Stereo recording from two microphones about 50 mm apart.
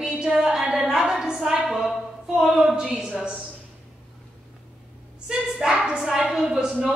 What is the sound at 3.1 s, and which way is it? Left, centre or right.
Speech, right.